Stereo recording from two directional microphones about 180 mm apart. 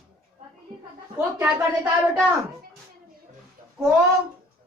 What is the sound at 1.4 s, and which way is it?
Speech, 10° right (ahead or behind).